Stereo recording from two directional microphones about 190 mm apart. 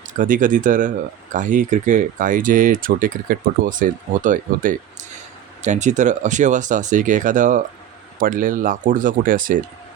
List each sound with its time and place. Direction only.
0.1 s speech: 45° right (ahead or behind)